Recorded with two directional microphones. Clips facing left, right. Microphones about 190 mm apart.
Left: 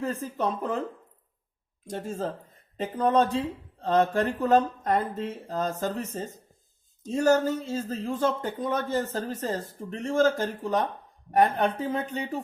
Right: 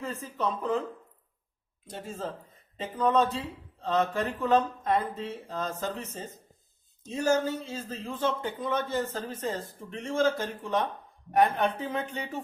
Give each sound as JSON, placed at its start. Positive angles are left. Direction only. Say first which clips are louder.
{"t": 0.0, "sound": "speech", "louder": "left 3 dB", "side_deg": 45}
{"t": 1.9, "sound": "speech", "louder": "left 5 dB", "side_deg": 45}